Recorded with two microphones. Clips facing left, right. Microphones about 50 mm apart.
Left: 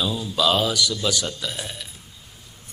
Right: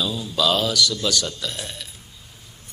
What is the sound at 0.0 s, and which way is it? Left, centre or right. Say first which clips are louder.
Speech: even; centre.